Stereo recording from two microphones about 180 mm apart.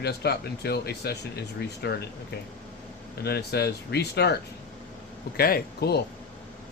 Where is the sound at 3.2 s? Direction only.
65° left (ahead or behind).